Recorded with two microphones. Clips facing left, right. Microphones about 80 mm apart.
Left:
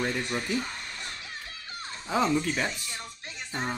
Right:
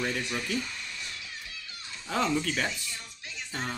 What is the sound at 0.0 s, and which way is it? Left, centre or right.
Speech, left.